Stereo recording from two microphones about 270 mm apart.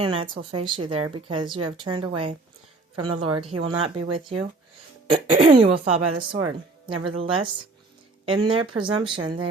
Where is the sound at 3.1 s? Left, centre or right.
Right.